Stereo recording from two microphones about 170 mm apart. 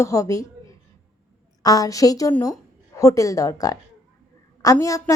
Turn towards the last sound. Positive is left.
turn(degrees=20)  # may be behind; listen again after turning